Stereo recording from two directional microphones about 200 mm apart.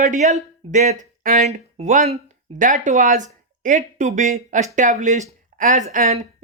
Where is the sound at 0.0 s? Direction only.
35° right (ahead or behind).